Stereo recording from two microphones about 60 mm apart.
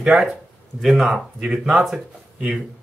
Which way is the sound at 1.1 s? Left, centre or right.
Right.